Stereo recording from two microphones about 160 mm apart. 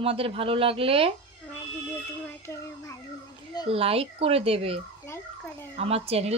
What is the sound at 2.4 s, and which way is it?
Child singing, 20° left (ahead or behind).